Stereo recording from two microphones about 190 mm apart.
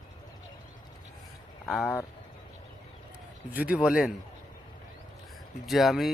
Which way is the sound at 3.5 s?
5° right (ahead or behind).